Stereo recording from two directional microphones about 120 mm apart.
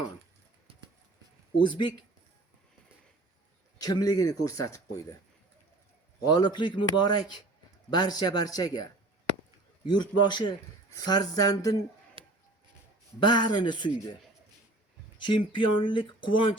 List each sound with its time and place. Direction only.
1.6 s speech: 40° left (ahead or behind)
3.8 s speech: 30° left (ahead or behind)
6.2 s speech: 35° left (ahead or behind)
12.2 s a sound: 45° right (ahead or behind)
13.2 s speech: 40° left (ahead or behind)
15.2 s speech: 45° left (ahead or behind)